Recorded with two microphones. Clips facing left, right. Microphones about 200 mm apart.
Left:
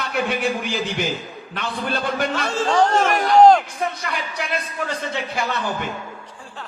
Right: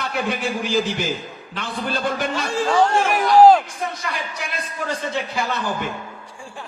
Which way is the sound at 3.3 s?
5° right (ahead or behind).